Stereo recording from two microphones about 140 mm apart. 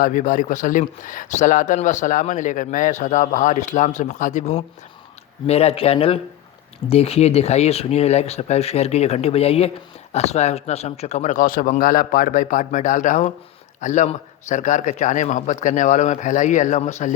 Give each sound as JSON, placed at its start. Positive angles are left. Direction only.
{"t": 0.0, "sound": "speech", "side_deg": 70}